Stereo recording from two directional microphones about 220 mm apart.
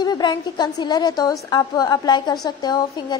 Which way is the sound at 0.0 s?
20° left (ahead or behind).